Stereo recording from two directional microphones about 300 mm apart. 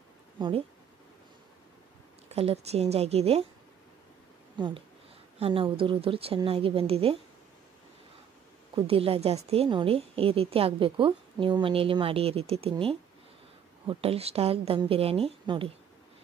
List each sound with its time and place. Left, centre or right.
0.4 s speech: centre
2.2 s a woman's voice: right
4.6 s speech: centre
8.7 s a woman's voice: centre